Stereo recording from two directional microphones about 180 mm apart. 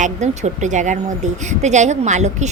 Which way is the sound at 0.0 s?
40° right (ahead or behind).